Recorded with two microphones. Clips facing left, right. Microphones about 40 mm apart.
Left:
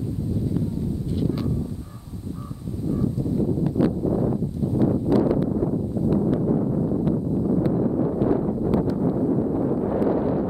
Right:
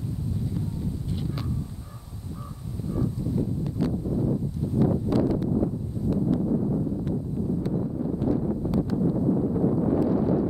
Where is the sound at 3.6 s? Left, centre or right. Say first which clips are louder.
Left 6 dB; left.